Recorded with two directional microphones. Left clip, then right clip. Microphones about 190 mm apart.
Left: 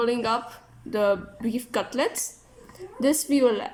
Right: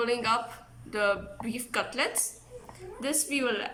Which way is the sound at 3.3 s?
20° left (ahead or behind).